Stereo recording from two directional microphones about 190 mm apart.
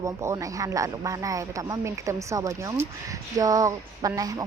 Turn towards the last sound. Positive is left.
turn(degrees=-20)  # may be behind; listen again after turning